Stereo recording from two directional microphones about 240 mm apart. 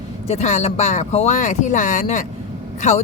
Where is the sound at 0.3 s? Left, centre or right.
Left.